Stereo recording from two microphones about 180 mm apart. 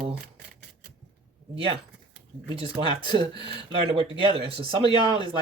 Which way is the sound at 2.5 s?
30° right (ahead or behind).